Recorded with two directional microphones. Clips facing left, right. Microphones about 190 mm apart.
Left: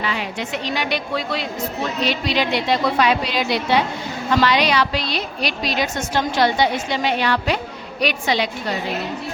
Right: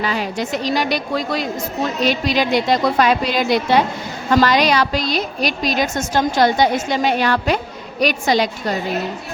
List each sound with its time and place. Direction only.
0.0 s a woman's voice: 40° right (ahead or behind)